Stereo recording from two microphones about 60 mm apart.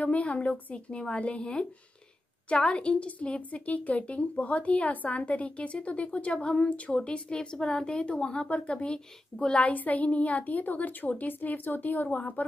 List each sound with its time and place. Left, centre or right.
0.0 s a woman's voice: left